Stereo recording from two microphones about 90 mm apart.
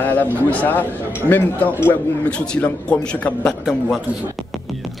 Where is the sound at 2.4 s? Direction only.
10° left (ahead or behind).